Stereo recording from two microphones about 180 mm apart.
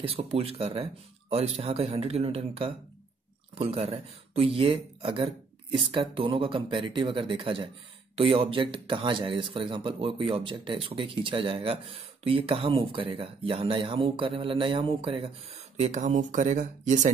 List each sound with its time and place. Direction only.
0.0 s speech: 35° right (ahead or behind)